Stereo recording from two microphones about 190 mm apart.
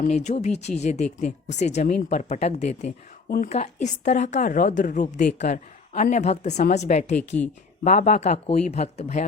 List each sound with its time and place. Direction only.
0.0 s a woman's voice: 35° left (ahead or behind)
3.2 s speech: 55° left (ahead or behind)
3.5 s a woman's voice: 40° left (ahead or behind)